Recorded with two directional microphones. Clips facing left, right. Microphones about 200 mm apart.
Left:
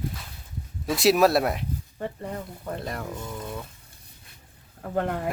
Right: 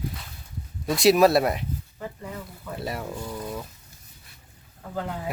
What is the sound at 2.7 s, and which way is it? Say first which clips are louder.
Speech: right 4 dB; 5° right (ahead or behind).